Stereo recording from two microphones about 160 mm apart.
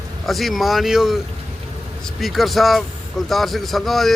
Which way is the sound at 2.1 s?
Centre (ahead or behind).